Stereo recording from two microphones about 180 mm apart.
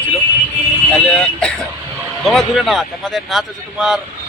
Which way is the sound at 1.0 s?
5° left (ahead or behind).